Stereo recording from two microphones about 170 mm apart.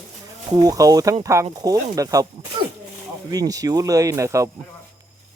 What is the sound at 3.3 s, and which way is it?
Speech, 20° right (ahead or behind).